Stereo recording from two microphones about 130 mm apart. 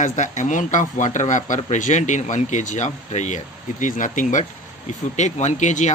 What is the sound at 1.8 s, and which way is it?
Speech, 70° left (ahead or behind).